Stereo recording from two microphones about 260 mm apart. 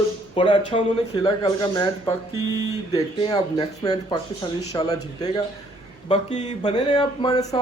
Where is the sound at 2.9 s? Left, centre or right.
Centre.